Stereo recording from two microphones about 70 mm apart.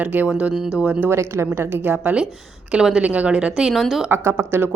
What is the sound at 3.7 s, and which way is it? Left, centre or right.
Speech, centre.